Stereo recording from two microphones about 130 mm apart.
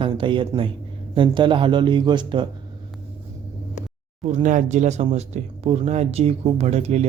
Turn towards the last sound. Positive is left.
turn(degrees=-55)  # may be behind; listen again after turning